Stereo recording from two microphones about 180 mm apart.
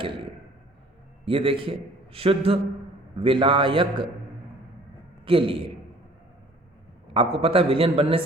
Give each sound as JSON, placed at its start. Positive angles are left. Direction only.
{"t": 1.2, "sound": "a man's voice", "side_deg": -30}
{"t": 5.2, "sound": "a man's voice", "side_deg": -30}
{"t": 7.1, "sound": "a man's voice", "side_deg": -30}